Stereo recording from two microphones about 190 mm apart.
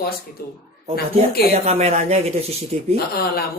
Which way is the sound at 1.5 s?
35° right (ahead or behind).